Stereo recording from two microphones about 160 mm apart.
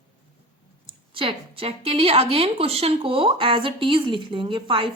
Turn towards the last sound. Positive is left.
turn(degrees=-30)  # may be behind; listen again after turning